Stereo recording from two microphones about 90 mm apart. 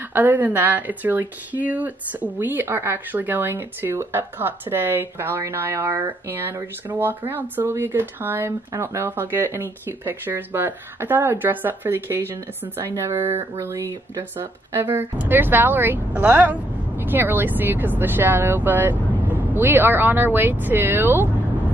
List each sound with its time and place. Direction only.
0.1 s speech: 20° right (ahead or behind)